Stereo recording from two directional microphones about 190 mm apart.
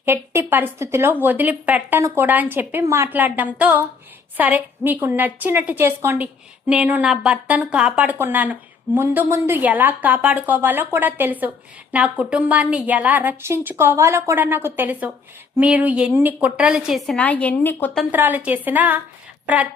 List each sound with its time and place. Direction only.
0.0 s a woman's voice: 10° right (ahead or behind); by 18.0 s 10° left (ahead or behind)
18.1 s a woman's voice: 10° right (ahead or behind)